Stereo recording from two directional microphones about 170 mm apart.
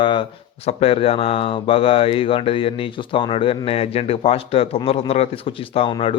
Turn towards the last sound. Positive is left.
turn(degrees=30)  # may be behind; listen again after turning